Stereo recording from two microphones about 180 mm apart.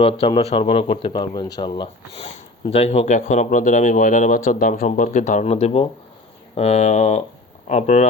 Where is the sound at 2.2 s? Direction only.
40° left (ahead or behind).